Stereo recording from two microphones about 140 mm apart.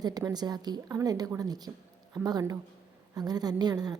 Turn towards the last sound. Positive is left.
turn(degrees=-30)  # may be behind; listen again after turning